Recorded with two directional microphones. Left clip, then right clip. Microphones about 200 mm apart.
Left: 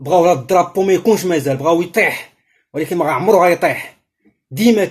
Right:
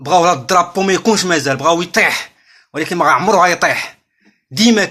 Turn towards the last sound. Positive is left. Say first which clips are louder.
# right 1 dB
turn(degrees=-40)  # may be behind; listen again after turning